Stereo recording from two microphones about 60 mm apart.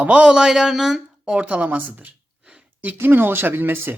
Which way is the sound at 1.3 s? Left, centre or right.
Right.